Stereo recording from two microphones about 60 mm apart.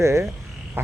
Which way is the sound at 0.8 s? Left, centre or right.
Right.